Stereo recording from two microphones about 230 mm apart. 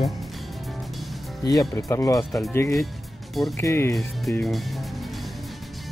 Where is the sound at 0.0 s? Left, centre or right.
Centre.